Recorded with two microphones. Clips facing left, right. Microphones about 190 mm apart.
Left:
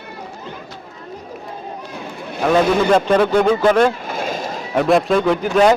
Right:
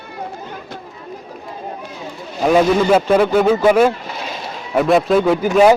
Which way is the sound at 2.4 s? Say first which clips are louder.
Right 2 dB; 10° right (ahead or behind).